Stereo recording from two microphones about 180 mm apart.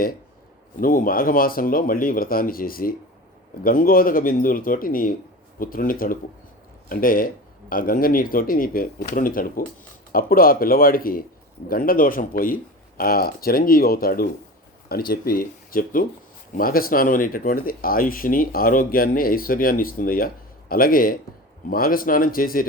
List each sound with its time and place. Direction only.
0.8 s speech: 50° left (ahead or behind)